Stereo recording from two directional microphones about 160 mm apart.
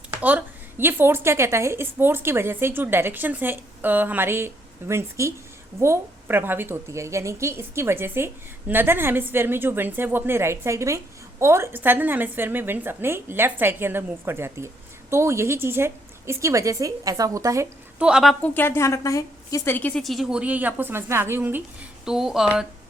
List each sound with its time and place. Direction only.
0.2 s a woman's voice: 10° right (ahead or behind)
18.0 s a woman's voice: 5° right (ahead or behind)
18.4 s a woman's voice: 10° left (ahead or behind); by 21.6 s 15° right (ahead or behind)
22.0 s a woman's voice: 5° right (ahead or behind)